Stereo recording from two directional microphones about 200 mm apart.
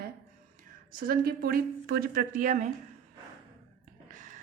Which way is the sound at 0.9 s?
45° right (ahead or behind).